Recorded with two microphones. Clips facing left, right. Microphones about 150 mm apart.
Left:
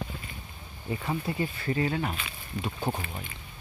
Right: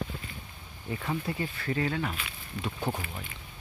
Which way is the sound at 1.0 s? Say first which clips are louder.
Left 2 dB; 15° left (ahead or behind).